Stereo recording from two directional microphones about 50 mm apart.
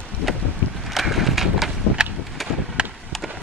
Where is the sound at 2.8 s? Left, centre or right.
Centre.